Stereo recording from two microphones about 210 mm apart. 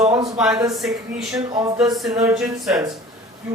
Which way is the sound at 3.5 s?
5° right (ahead or behind).